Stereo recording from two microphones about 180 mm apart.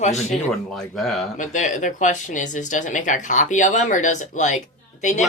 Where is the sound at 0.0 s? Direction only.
40° left (ahead or behind).